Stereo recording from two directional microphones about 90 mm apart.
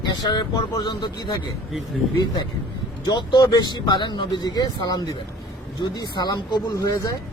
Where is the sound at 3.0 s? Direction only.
55° left (ahead or behind).